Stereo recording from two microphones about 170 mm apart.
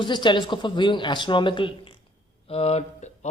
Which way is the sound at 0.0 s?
25° left (ahead or behind).